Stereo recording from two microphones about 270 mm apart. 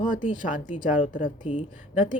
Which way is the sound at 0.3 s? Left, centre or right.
Left.